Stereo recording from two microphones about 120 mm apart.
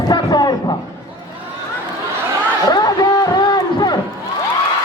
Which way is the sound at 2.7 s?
35° left (ahead or behind).